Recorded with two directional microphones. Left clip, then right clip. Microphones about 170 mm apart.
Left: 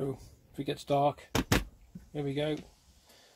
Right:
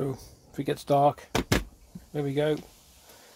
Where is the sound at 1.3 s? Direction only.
10° left (ahead or behind).